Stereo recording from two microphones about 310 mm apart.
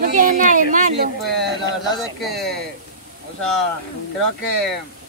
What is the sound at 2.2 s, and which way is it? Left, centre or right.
Speech, centre.